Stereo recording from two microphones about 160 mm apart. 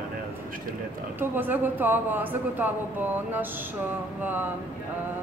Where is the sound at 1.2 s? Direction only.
10° right (ahead or behind).